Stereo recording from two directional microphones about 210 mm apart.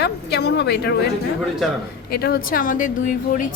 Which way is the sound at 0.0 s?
50° left (ahead or behind).